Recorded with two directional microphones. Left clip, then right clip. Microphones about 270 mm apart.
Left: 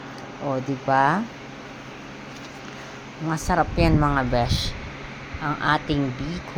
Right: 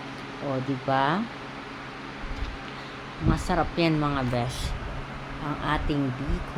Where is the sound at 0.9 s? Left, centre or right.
Centre.